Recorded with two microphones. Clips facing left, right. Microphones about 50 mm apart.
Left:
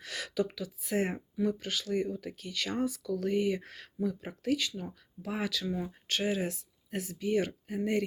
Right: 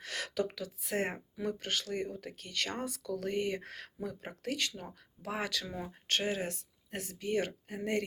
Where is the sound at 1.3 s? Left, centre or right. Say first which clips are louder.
Left 4 dB; right.